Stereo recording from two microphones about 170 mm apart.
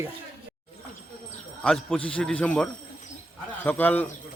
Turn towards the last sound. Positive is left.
turn(degrees=10)  # may be behind; listen again after turning